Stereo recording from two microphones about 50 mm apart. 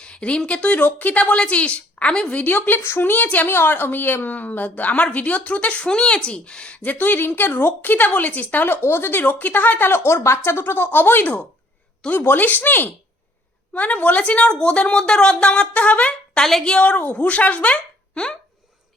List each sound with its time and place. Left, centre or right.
0.0 s speech: left
0.8 s a woman's voice: left
6.8 s a woman's voice: left
8.6 s speech: left
10.2 s a woman's voice: left; by 18.3 s centre